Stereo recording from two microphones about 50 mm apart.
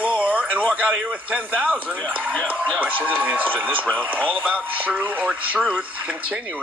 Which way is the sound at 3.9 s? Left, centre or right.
Left.